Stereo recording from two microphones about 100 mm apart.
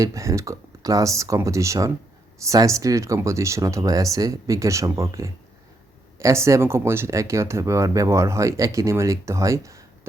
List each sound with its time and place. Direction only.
0.0 s speech: 35° right (ahead or behind)